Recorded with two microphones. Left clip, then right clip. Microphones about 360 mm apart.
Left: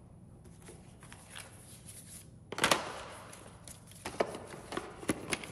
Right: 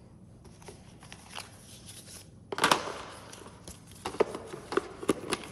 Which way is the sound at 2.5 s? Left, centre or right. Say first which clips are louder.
Right 4 dB; centre.